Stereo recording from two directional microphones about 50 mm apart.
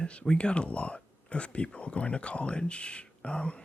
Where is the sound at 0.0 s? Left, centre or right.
Left.